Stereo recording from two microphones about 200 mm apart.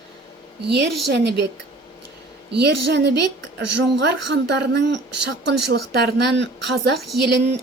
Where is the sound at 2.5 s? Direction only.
55° right (ahead or behind).